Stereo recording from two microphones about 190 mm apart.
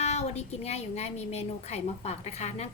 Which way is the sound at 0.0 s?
35° left (ahead or behind).